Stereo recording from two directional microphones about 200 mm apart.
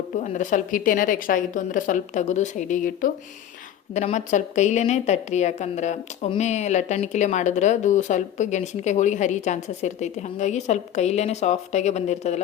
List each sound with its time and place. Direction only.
0.2 s a woman's voice: 40° left (ahead or behind)